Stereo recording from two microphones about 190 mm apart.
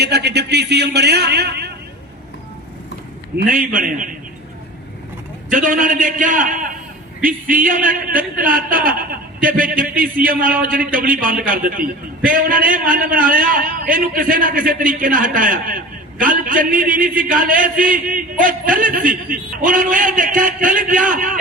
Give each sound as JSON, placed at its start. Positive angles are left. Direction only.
{"t": 0.0, "sound": "a man's voice", "side_deg": -60}
{"t": 3.3, "sound": "a man's voice", "side_deg": -45}
{"t": 5.5, "sound": "a man's voice", "side_deg": -45}